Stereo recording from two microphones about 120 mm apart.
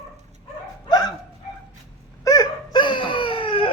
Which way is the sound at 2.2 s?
30° left (ahead or behind).